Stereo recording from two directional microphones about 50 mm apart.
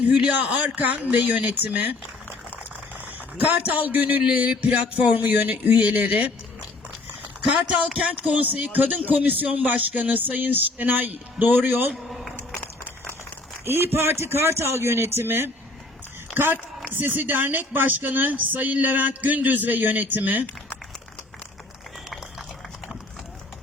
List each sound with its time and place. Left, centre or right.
0.1 s speech: right
0.3 s speech: right
3.4 s speech: right
8.2 s speech: right
12.0 s a sound: centre
13.7 s speech: right